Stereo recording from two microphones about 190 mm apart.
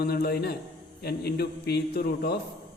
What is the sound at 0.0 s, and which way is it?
A man's voice, 55° left (ahead or behind).